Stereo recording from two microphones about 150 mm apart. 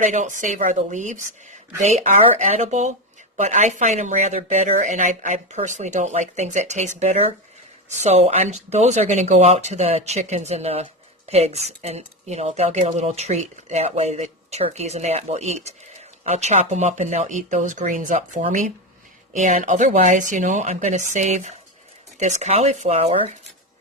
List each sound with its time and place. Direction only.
0.0 s speech: 55° right (ahead or behind)